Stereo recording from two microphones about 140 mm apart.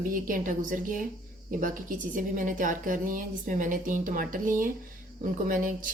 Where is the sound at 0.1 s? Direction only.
70° right (ahead or behind).